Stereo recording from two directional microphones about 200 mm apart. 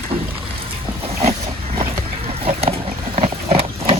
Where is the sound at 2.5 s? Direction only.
30° right (ahead or behind).